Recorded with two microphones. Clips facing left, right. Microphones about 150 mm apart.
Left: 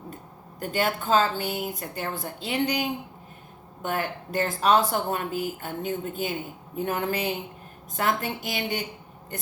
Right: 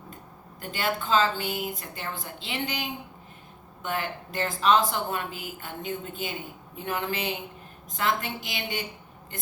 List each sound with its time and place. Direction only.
0.6 s speech: 50° left (ahead or behind)
3.8 s speech: 50° left (ahead or behind)